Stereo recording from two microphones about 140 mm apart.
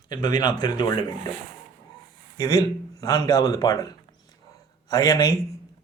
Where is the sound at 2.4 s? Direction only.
25° left (ahead or behind).